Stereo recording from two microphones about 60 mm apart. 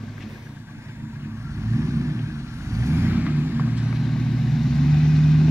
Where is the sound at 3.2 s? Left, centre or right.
Right.